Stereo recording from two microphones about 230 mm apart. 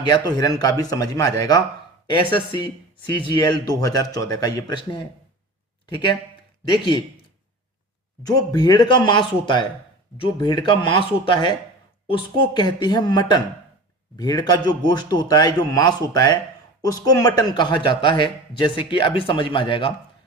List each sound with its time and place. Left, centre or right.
0.0 s a man's voice: centre
3.2 s a man's voice: centre
8.2 s a man's voice: centre